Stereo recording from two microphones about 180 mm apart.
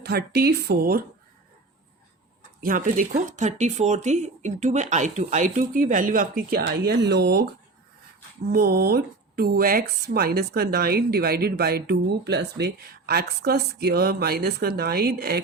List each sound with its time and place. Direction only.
0.0 s speech: 60° right (ahead or behind)
2.6 s speech: 50° right (ahead or behind)
8.4 s speech: 60° right (ahead or behind)